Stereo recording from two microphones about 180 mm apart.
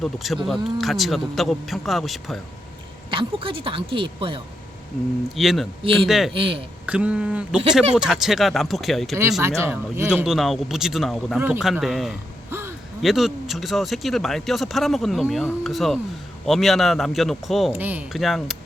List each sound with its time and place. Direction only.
0.0 s a man's voice: centre (ahead or behind)
3.1 s speech: 30° right (ahead or behind)
5.3 s a man's voice: centre (ahead or behind)
5.8 s speech: 30° right (ahead or behind)
6.1 s a man's voice: centre (ahead or behind)
6.3 s speech: 30° right (ahead or behind)
6.8 s a man's voice: 5° right (ahead or behind)
9.4 s a man's voice: 15° right (ahead or behind)
12.5 s gasp: 15° right (ahead or behind)
13.0 s a man's voice: centre (ahead or behind)